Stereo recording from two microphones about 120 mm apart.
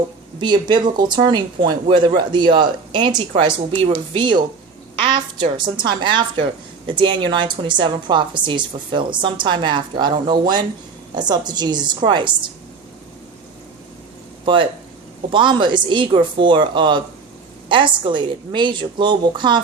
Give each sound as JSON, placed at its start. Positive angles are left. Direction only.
{"t": 0.3, "sound": "a woman's voice", "side_deg": -40}
{"t": 14.4, "sound": "a woman's voice", "side_deg": -45}